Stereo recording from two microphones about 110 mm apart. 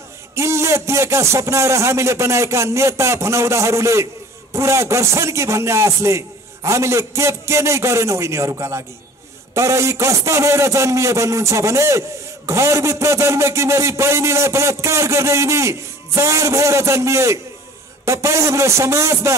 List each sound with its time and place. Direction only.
0.4 s a man's voice: 25° right (ahead or behind)